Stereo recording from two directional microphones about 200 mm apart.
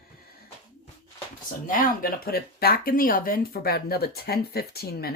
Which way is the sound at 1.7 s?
45° left (ahead or behind).